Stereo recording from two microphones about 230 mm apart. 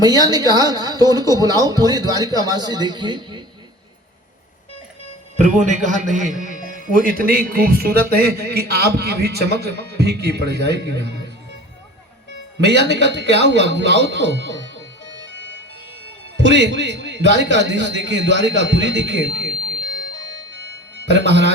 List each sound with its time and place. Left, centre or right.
0.0 s a man's voice: centre
5.4 s a man's voice: right
12.6 s a man's voice: right
16.4 s a man's voice: right
20.9 s speech: right